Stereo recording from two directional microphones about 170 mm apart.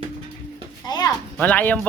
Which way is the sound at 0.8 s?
25° left (ahead or behind).